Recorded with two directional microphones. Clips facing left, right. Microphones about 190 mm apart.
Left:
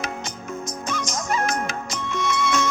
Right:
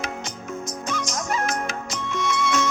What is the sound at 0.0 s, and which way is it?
Music, 55° left (ahead or behind).